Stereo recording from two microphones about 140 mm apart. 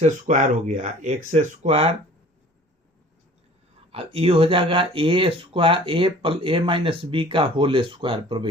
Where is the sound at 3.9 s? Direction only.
40° right (ahead or behind).